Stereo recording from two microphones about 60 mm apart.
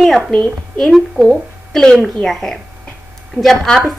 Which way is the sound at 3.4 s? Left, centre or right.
Right.